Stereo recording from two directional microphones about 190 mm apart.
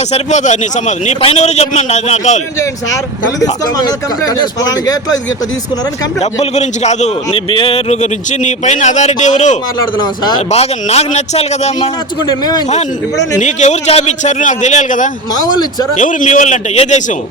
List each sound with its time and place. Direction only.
0.1 s a man's voice: 40° left (ahead or behind)
3.4 s speech: 20° left (ahead or behind)
6.4 s a man's voice: 35° left (ahead or behind)
13.4 s a man's voice: 40° left (ahead or behind)